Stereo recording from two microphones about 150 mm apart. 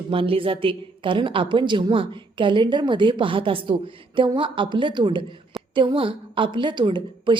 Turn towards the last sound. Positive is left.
turn(degrees=-30)  # may be behind; listen again after turning